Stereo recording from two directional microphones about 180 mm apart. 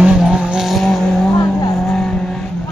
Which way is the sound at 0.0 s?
5° right (ahead or behind).